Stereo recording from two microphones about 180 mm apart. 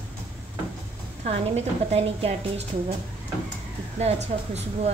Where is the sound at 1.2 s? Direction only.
35° right (ahead or behind).